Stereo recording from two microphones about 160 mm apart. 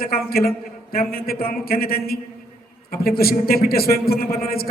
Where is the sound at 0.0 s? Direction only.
70° left (ahead or behind).